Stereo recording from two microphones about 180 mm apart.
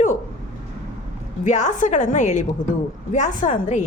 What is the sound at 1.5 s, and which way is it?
A woman's voice, 40° left (ahead or behind).